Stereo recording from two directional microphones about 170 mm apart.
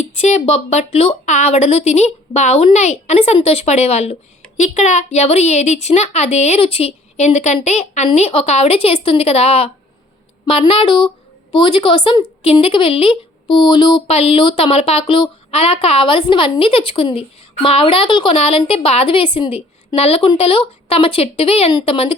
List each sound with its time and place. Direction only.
0.2 s a woman's voice: 40° left (ahead or behind)